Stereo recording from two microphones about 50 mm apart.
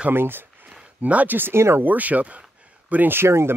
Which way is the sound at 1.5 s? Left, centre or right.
Right.